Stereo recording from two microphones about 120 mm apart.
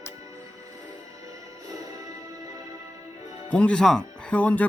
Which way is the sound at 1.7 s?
30° right (ahead or behind).